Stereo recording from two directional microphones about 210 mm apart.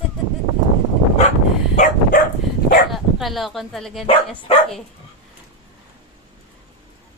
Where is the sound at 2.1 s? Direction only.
40° left (ahead or behind).